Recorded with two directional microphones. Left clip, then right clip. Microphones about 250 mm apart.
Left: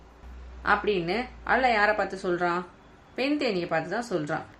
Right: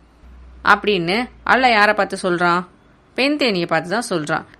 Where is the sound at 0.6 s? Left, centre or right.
Right.